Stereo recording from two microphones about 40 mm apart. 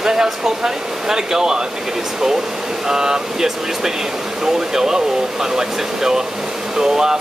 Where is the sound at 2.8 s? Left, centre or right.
Centre.